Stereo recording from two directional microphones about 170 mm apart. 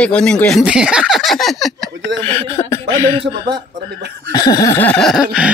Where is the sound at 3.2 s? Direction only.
90° right.